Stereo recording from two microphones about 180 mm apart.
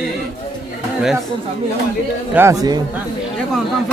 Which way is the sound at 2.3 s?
15° right (ahead or behind).